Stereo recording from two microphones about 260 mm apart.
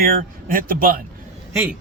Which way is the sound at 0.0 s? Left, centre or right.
Right.